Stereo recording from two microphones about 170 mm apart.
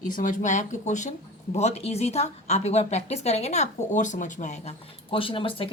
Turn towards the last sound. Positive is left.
turn(degrees=30)  # may be behind; listen again after turning